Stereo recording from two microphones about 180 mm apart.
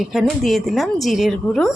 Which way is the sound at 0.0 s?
Centre (ahead or behind).